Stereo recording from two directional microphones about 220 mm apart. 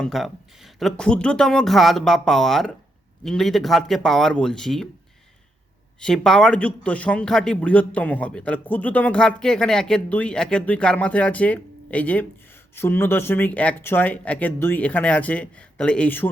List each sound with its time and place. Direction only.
0.0 s a man's voice: centre (ahead or behind)
6.0 s a man's voice: 5° left (ahead or behind)